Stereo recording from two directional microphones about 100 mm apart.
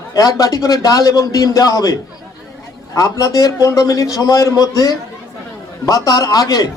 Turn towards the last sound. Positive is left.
turn(degrees=35)  # may be behind; listen again after turning